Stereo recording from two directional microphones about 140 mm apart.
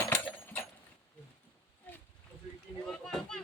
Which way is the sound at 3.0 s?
Centre (ahead or behind).